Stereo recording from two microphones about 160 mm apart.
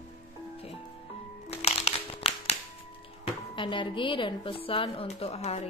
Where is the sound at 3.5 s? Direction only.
30° left (ahead or behind).